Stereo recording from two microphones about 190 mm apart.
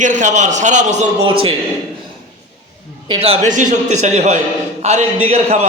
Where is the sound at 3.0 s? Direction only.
30° right (ahead or behind).